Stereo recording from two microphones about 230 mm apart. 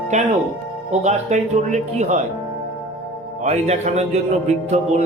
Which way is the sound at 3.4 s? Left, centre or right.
Right.